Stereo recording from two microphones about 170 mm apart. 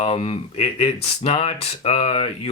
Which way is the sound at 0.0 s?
35° left (ahead or behind).